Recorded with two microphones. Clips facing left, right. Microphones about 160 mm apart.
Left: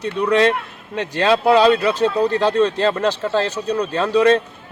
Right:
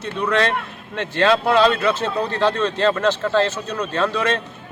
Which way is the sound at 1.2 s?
10° left (ahead or behind).